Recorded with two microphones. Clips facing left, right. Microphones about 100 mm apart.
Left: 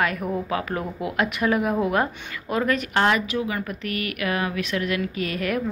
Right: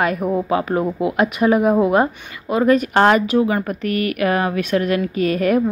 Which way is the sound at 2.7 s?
40° right (ahead or behind).